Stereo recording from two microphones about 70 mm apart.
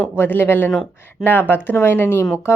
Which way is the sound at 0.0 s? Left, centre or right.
Left.